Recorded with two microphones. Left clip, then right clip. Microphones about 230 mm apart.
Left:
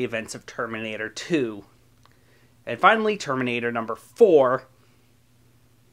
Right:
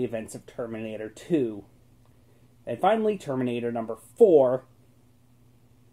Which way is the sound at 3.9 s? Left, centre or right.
Left.